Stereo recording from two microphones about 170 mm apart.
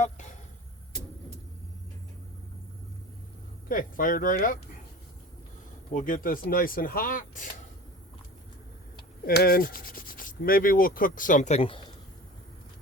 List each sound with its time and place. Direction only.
3.7 s speech: 55° left (ahead or behind)
5.9 s rub: 50° left (ahead or behind)
9.2 s rub: 65° left (ahead or behind); by 11.6 s 45° left (ahead or behind)